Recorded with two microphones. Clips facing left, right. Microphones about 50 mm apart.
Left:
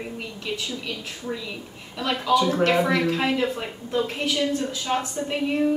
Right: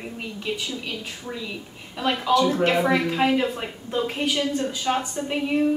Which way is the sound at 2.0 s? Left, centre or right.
Centre.